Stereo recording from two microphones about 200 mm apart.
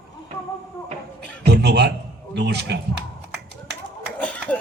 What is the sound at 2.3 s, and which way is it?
Speech, 55° right (ahead or behind).